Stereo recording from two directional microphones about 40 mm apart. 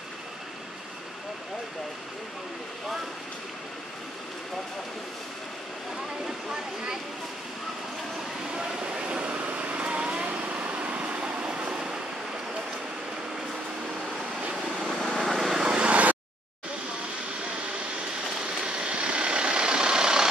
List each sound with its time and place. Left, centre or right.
6.2 s speech: centre
8.5 s vehicle: right
14.9 s vehicle: centre
15.3 s vehicle: centre
15.6 s vehicle: centre
15.9 s a sound: right
18.6 s vehicle: right